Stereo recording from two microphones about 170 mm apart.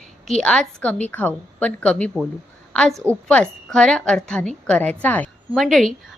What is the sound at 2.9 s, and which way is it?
Speech, 15° right (ahead or behind).